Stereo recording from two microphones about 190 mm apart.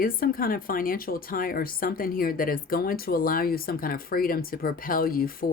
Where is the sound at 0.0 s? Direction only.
50° left (ahead or behind).